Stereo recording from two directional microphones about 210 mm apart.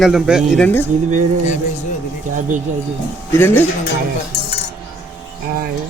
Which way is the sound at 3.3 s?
10° left (ahead or behind).